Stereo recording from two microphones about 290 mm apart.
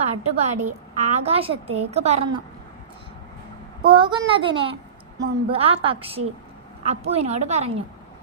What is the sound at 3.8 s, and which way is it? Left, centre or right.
A child's voice, centre.